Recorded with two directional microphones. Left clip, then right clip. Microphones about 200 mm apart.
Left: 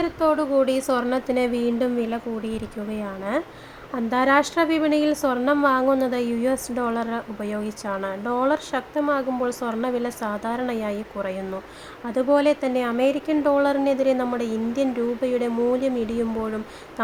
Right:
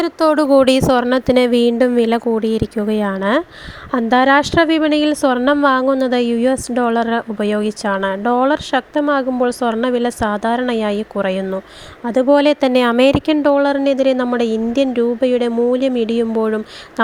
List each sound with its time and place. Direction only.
0.0 s a woman's voice: 60° right (ahead or behind); by 16.6 s 35° right (ahead or behind)